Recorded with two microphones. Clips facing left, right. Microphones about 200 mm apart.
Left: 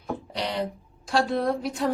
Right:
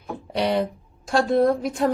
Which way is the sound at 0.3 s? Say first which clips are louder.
Right 8 dB; 55° right (ahead or behind).